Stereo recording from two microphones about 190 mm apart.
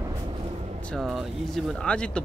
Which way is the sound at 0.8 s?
Centre (ahead or behind).